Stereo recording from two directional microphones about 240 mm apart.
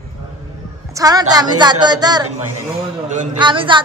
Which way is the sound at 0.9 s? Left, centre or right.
Centre.